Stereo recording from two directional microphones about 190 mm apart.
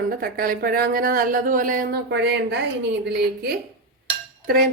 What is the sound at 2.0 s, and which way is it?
Speech, 65° right (ahead or behind).